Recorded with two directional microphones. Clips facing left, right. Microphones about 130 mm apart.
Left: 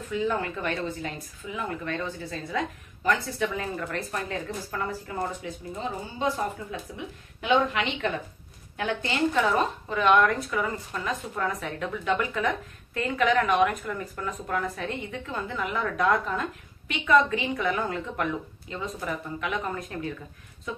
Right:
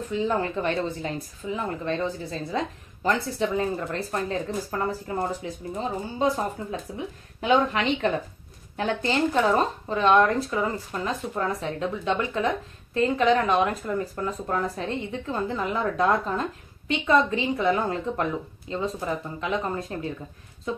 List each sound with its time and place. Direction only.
0.1 s speech: 30° right (ahead or behind)